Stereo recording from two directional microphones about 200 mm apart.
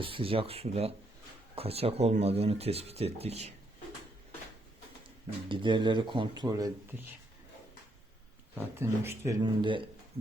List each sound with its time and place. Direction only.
0.0 s speech: 25° right (ahead or behind)
5.5 s speech: 25° right (ahead or behind)
8.5 s speech: 10° right (ahead or behind)